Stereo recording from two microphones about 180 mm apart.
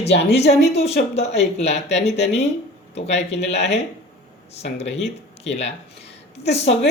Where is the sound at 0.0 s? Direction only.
65° left (ahead or behind).